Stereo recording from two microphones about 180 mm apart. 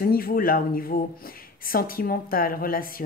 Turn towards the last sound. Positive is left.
turn(degrees=50)  # may be behind; listen again after turning